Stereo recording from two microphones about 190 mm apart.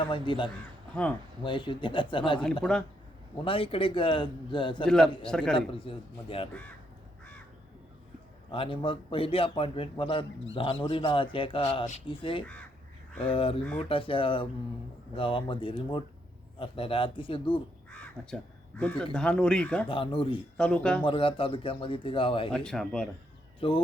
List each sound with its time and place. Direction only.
0.1 s speech: 25° left (ahead or behind)
2.6 s speech: 5° left (ahead or behind)
3.4 s speech: 30° left (ahead or behind)
5.2 s speech: 5° left (ahead or behind)
5.5 s speech: 30° left (ahead or behind)
8.4 s speech: 30° left (ahead or behind)
17.9 s crow: 5° left (ahead or behind)
18.8 s speech: 5° left (ahead or behind)
19.9 s speech: 25° left (ahead or behind)
20.6 s speech: 5° left (ahead or behind)
21.0 s speech: 30° left (ahead or behind)
22.5 s speech: 5° left (ahead or behind)
23.6 s speech: 30° left (ahead or behind)